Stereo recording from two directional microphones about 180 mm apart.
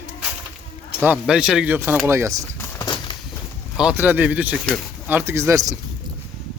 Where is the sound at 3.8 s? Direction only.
10° right (ahead or behind).